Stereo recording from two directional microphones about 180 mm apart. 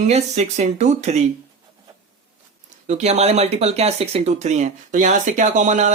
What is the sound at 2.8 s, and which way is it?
Speech, 40° right (ahead or behind).